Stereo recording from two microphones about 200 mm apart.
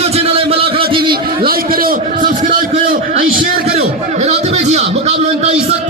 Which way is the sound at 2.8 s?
45° right (ahead or behind).